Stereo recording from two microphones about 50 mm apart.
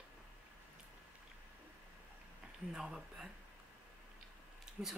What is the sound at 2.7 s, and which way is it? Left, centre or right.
Speech, centre.